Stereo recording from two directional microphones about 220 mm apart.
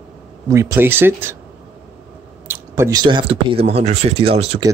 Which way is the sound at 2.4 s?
10° right (ahead or behind).